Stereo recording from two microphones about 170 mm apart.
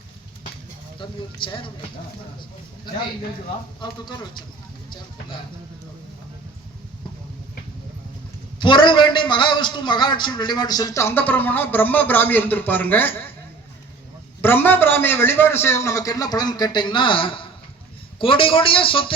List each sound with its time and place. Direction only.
0.9 s a man's voice: 30° left (ahead or behind)
3.8 s a man's voice: 25° left (ahead or behind)
8.5 s a man's voice: 30° left (ahead or behind); by 13.3 s 10° left (ahead or behind)
14.4 s a man's voice: 10° left (ahead or behind); by 19.1 s 30° left (ahead or behind)